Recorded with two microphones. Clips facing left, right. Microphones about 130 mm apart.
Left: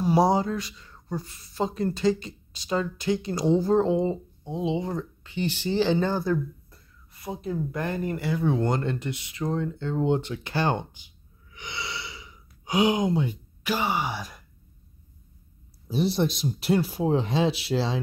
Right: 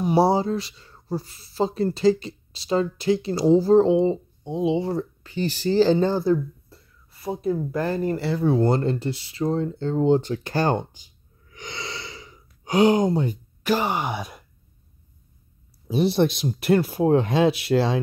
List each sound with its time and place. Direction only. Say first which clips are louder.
0.0 s speech: right 2 dB; 30° right (ahead or behind)
6.0 s speech: right 5 dB; 25° right (ahead or behind); by 11.1 s 40° right (ahead or behind)
11.5 s gasp: right 1 dB; 45° right (ahead or behind)
15.9 s speech: right 4 dB; 60° right (ahead or behind)